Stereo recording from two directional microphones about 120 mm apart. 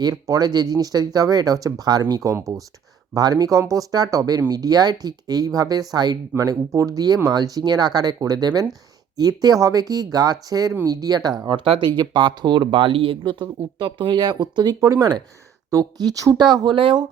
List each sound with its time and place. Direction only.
0.0 s speech: 30° right (ahead or behind)